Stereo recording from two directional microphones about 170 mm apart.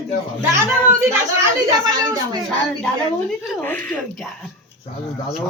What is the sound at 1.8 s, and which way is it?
Speech, 20° right (ahead or behind).